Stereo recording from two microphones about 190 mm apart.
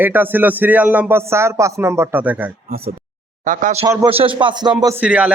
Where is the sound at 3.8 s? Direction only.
25° right (ahead or behind).